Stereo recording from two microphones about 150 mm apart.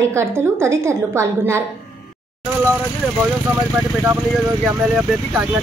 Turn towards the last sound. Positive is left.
turn(degrees=-5)  # may be behind; listen again after turning